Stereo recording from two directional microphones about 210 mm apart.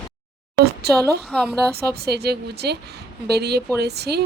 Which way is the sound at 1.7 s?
50° right (ahead or behind).